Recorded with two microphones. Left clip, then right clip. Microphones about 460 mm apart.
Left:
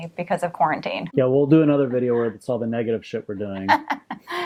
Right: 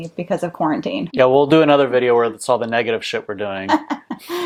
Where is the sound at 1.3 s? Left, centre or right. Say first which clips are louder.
Right 4 dB; right.